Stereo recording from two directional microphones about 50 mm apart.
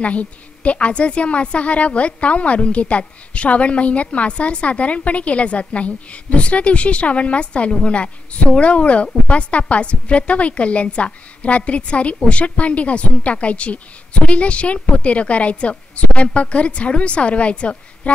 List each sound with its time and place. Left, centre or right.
0.0 s a woman's voice: left